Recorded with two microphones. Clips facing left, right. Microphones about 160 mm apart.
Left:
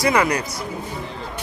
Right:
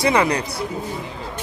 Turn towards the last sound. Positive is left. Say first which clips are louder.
# right 1 dB
turn(degrees=-25)  # may be behind; listen again after turning